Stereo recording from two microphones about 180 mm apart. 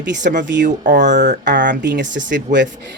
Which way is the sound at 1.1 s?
75° right (ahead or behind).